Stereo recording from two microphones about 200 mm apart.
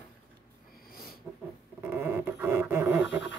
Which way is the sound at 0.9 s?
50° left (ahead or behind).